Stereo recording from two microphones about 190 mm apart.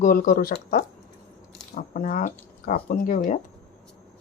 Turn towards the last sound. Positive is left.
turn(degrees=45)  # may be behind; listen again after turning